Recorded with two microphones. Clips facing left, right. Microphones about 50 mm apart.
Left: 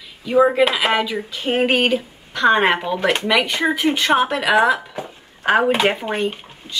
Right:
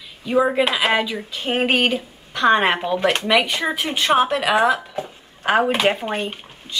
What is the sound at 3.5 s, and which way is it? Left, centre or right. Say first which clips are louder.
Speech: left 4 dB; left.